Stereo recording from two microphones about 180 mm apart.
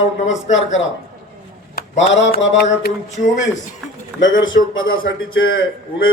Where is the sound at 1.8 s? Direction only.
55° left (ahead or behind).